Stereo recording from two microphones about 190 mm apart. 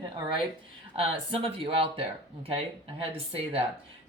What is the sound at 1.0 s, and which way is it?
Speech, 30° right (ahead or behind).